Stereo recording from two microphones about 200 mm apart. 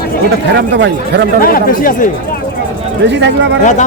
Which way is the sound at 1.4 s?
45° left (ahead or behind).